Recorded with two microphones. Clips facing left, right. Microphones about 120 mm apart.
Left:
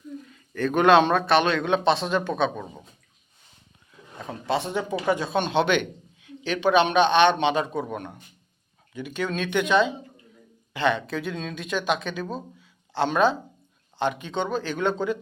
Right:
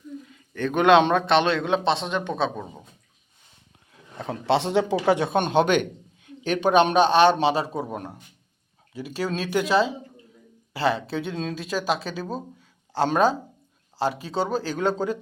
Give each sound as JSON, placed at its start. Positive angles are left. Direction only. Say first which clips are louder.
{"t": 0.5, "sound": "speech", "louder": "even", "side_deg": -20}
{"t": 4.2, "sound": "speech", "louder": "right 4 dB", "side_deg": -70}
{"t": 5.3, "sound": "speech", "louder": "right 2 dB", "side_deg": -45}
{"t": 12.5, "sound": "a sound", "louder": "right 1 dB", "side_deg": -40}
{"t": 14.0, "sound": "speech", "louder": "right 1 dB", "side_deg": -35}